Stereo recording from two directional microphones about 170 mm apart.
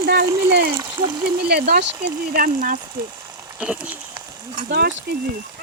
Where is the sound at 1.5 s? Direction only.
60° right (ahead or behind).